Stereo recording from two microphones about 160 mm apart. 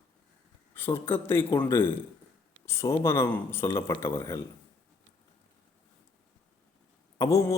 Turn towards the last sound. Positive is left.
turn(degrees=20)  # may be behind; listen again after turning